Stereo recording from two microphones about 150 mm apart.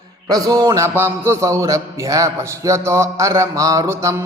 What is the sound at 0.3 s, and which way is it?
A man's voice, 25° right (ahead or behind).